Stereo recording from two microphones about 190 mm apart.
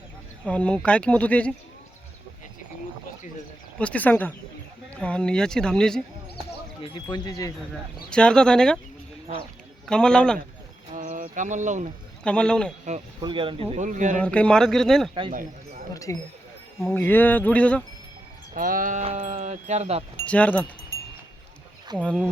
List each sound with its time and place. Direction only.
0.4 s speech: 5° left (ahead or behind)
3.8 s speech: 5° left (ahead or behind)
6.8 s speech: 25° left (ahead or behind)
7.7 s speech: 5° left (ahead or behind)
9.8 s speech: 5° left (ahead or behind)
10.9 s a sound: 45° right (ahead or behind)
12.2 s speech: 5° left (ahead or behind)
13.2 s speech: 25° right (ahead or behind)
14.2 s speech: 5° left (ahead or behind)
15.3 s a sound: 45° right (ahead or behind)
15.9 s speech: 15° left (ahead or behind)
18.5 s speech: 45° right (ahead or behind)
20.2 s speech: 5° left (ahead or behind)
21.9 s speech: 20° right (ahead or behind)